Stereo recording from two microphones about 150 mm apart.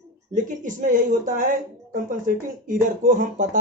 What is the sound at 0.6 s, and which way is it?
Speech, 60° right (ahead or behind).